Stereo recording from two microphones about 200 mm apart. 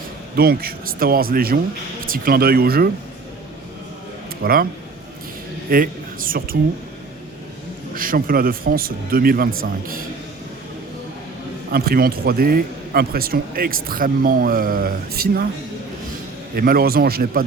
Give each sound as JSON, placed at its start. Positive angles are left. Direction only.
{"t": 0.3, "sound": "a man's voice", "side_deg": -50}
{"t": 4.4, "sound": "a man's voice", "side_deg": -50}
{"t": 5.7, "sound": "speech", "side_deg": -45}
{"t": 7.9, "sound": "a man's voice", "side_deg": -45}
{"t": 11.7, "sound": "a man's voice", "side_deg": -50}
{"t": 16.6, "sound": "a man's voice", "side_deg": -50}